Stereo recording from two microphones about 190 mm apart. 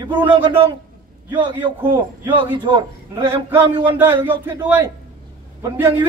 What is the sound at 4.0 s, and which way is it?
A man's voice, 10° right (ahead or behind).